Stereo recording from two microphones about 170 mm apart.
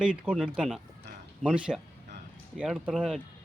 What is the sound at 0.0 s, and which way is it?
Speech, 5° right (ahead or behind).